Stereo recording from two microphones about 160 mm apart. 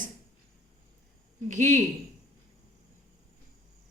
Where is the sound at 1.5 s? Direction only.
50° right (ahead or behind).